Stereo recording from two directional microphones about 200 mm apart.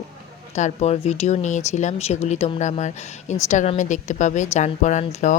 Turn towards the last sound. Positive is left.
turn(degrees=35)  # may be behind; listen again after turning